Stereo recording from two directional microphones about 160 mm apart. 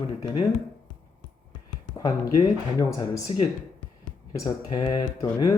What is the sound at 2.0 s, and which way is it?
Speech, 25° left (ahead or behind).